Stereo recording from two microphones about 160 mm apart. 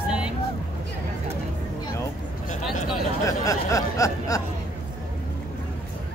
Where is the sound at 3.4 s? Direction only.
20° left (ahead or behind).